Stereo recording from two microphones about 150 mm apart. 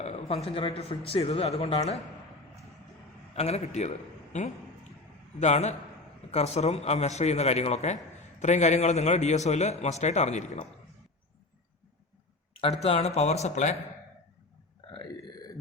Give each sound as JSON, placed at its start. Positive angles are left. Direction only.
{"t": 0.0, "sound": "a man's voice", "side_deg": 45}
{"t": 3.3, "sound": "a man's voice", "side_deg": 45}
{"t": 12.8, "sound": "a man's voice", "side_deg": 45}
{"t": 14.9, "sound": "burping", "side_deg": 25}